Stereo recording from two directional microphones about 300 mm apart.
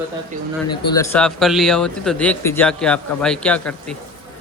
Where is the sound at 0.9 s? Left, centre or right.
Centre.